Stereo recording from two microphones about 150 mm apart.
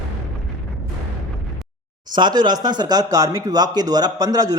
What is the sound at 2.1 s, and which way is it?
Speech, 30° right (ahead or behind).